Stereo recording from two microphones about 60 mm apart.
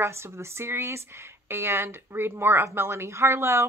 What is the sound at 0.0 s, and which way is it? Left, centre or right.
Speech, right.